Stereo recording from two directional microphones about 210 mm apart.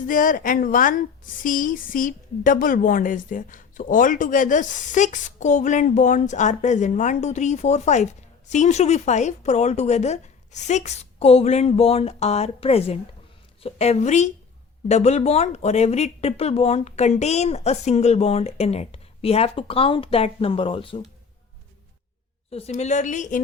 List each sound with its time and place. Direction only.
0.1 s a woman's voice: 40° left (ahead or behind); by 21.1 s 25° left (ahead or behind)
22.4 s a woman's voice: 30° left (ahead or behind)